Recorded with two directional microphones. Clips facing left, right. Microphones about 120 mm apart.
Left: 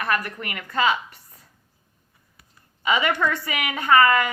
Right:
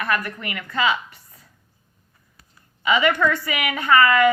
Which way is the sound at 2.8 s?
35° left (ahead or behind).